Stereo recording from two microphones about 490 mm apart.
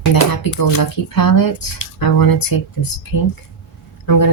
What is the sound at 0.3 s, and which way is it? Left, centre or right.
Speech, left.